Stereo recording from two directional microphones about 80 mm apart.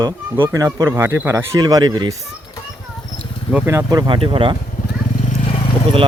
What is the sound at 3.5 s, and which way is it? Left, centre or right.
Speech, left.